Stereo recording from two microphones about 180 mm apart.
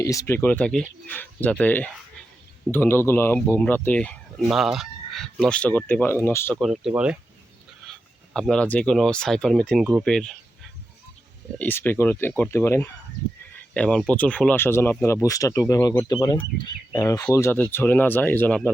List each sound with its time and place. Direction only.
0.0 s speech: 20° left (ahead or behind)
6.6 s speech: centre (ahead or behind)
8.3 s speech: 5° left (ahead or behind)
11.6 s speech: 10° left (ahead or behind)